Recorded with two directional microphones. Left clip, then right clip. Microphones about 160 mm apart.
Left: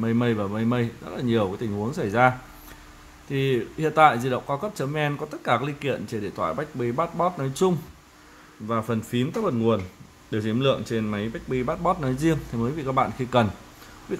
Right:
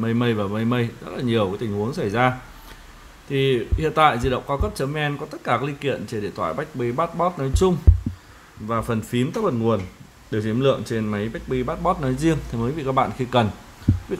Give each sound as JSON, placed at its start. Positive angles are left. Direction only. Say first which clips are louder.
{"t": 0.0, "sound": "speech", "louder": "right 2 dB", "side_deg": 0}